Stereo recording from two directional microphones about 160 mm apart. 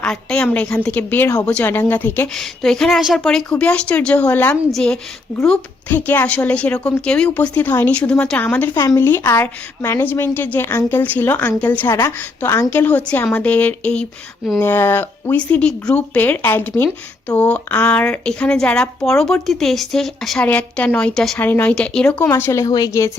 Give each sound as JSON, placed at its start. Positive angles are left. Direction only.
{"t": 0.0, "sound": "speech", "side_deg": 5}
{"t": 14.6, "sound": "a woman's voice", "side_deg": 15}